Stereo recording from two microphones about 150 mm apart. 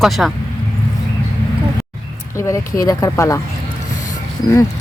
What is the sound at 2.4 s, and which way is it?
Speech, 20° left (ahead or behind).